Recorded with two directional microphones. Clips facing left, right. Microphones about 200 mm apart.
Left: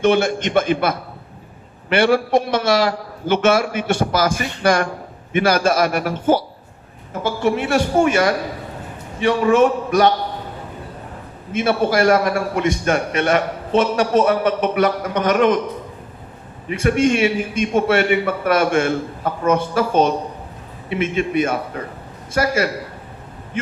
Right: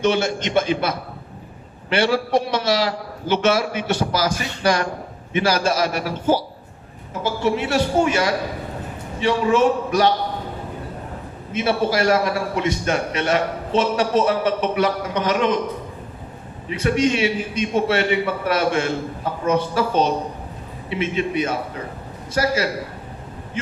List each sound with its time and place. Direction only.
0.0 s a man's voice: 55° left (ahead or behind)
11.5 s a man's voice: 50° left (ahead or behind)
16.6 s a man's voice: 50° left (ahead or behind)